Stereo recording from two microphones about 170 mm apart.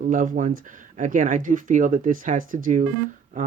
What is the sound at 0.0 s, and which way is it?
Speech, 50° right (ahead or behind).